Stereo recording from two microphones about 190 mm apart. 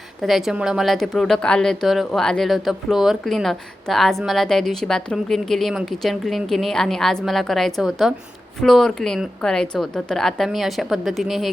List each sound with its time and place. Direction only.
0.2 s a woman's voice: centre (ahead or behind)